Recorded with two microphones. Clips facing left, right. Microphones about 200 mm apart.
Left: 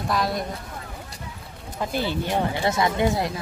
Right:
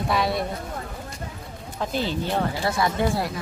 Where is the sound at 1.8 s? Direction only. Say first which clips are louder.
Even; 10° left (ahead or behind).